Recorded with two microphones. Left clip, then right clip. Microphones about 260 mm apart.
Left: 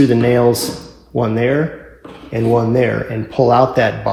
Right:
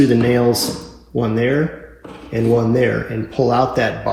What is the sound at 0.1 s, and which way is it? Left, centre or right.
Speech, left.